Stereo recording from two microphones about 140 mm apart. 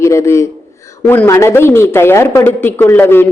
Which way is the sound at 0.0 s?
20° left (ahead or behind).